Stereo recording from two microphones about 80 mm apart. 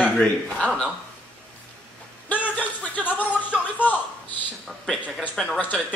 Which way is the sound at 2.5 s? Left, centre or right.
Centre.